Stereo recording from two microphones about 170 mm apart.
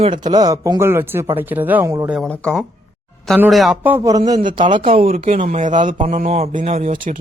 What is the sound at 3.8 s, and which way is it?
Speech, 15° right (ahead or behind).